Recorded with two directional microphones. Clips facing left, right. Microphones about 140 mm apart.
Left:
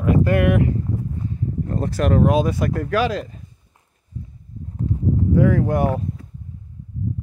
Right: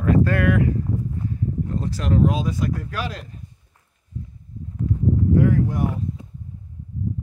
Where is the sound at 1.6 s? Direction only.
55° left (ahead or behind); by 3.2 s 90° left.